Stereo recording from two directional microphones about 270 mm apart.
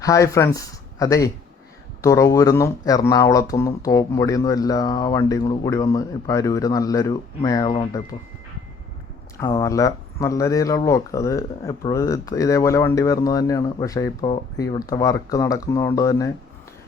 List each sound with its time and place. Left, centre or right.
0.0 s speech: centre
9.4 s speech: centre